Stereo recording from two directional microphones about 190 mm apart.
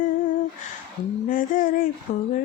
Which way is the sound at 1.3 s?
45° left (ahead or behind).